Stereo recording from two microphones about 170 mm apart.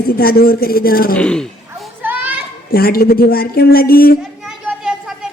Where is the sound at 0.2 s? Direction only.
60° left (ahead or behind).